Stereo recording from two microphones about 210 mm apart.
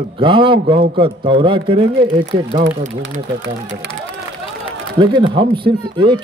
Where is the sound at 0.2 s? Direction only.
25° right (ahead or behind).